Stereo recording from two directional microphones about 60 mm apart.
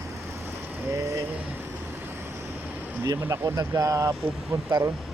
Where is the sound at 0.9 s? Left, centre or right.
Right.